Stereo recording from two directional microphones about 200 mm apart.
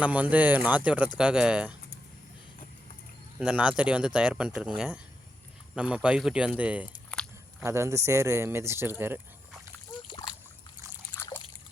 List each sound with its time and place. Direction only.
0.0 s speech: 5° right (ahead or behind)
3.3 s speech: 5° right (ahead or behind)
10.1 s splash: 25° left (ahead or behind)
11.2 s trickle: 10° left (ahead or behind)